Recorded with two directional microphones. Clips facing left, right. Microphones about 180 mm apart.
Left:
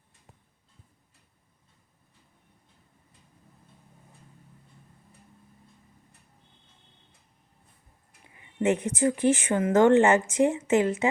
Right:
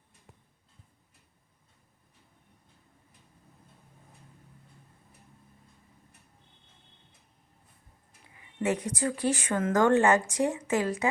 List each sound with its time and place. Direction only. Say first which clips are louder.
8.6 s speech: left 5 dB; 25° left (ahead or behind)